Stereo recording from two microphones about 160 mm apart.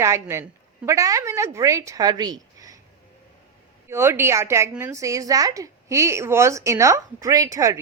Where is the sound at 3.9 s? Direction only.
15° right (ahead or behind).